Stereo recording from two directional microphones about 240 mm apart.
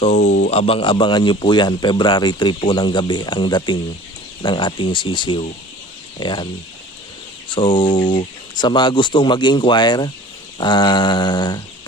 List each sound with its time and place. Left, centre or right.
0.0 s speech: left
7.5 s speech: centre